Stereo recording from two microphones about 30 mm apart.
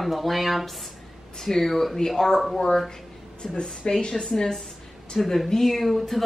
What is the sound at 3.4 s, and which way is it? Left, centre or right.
Speech, left.